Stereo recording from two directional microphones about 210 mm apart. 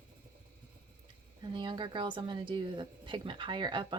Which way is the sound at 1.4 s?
20° right (ahead or behind).